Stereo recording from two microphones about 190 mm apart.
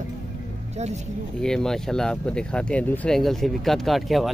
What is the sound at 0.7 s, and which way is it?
Speech, 35° right (ahead or behind).